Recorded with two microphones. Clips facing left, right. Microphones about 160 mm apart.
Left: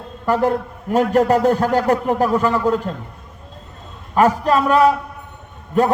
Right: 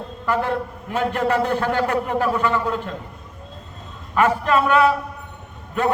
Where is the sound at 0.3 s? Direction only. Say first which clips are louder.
Left 5 dB; 40° left (ahead or behind).